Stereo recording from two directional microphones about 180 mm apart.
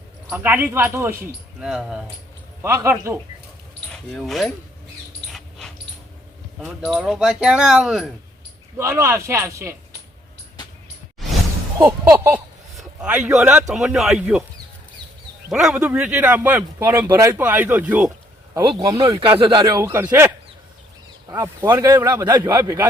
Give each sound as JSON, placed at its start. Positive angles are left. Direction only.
{"t": 0.3, "sound": "a man's voice", "side_deg": -10}
{"t": 2.6, "sound": "a man's voice", "side_deg": -15}
{"t": 3.8, "sound": "speech", "side_deg": 5}
{"t": 5.3, "sound": "dog", "side_deg": 0}
{"t": 6.6, "sound": "a man's voice", "side_deg": -5}
{"t": 8.8, "sound": "a man's voice", "side_deg": -15}
{"t": 11.8, "sound": "a man's voice", "side_deg": -10}
{"t": 15.5, "sound": "a man's voice", "side_deg": -5}
{"t": 18.6, "sound": "a man's voice", "side_deg": -25}